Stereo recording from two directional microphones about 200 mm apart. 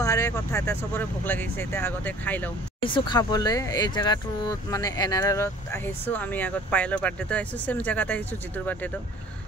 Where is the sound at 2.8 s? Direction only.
25° left (ahead or behind); by 8.9 s 10° left (ahead or behind).